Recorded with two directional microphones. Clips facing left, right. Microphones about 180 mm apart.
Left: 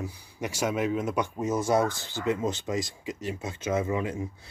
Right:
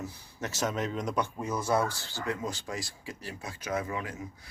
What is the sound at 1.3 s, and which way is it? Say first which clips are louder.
Speech: left 6 dB; 25° left (ahead or behind).